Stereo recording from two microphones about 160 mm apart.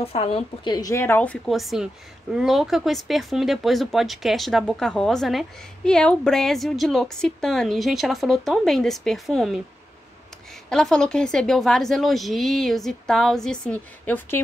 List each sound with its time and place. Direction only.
0.0 s a woman's voice: 35° left (ahead or behind)
0.7 s a woman's voice: 20° left (ahead or behind); by 9.6 s centre (ahead or behind)
10.7 s speech: 5° left (ahead or behind)